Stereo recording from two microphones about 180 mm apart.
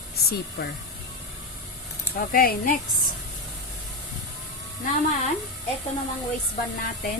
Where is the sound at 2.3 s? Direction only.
55° left (ahead or behind).